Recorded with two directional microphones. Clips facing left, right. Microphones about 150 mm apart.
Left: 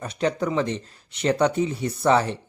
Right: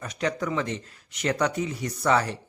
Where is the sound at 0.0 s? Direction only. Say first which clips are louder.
Left 4 dB; 30° left (ahead or behind).